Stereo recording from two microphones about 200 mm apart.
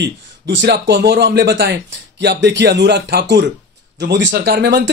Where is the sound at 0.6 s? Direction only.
60° right (ahead or behind).